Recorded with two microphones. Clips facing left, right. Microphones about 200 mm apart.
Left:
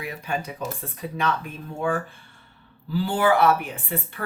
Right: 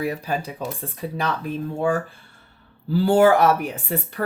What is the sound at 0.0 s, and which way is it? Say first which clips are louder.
Speech: right 5 dB; 35° right (ahead or behind).